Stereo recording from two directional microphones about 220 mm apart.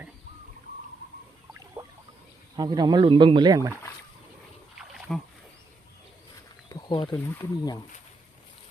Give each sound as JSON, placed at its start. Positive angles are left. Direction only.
{"t": 1.5, "sound": "a sound", "side_deg": -20}
{"t": 2.6, "sound": "speech", "side_deg": -20}
{"t": 4.8, "sound": "splash", "side_deg": 0}
{"t": 6.7, "sound": "wild animals", "side_deg": 20}
{"t": 7.3, "sound": "speech", "side_deg": 15}